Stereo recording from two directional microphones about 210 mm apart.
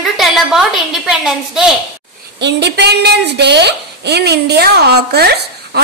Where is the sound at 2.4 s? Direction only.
55° right (ahead or behind).